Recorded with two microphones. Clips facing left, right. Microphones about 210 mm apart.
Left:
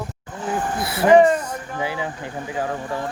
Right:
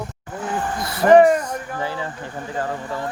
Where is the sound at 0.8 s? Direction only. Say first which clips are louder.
Right 1 dB; 10° left (ahead or behind).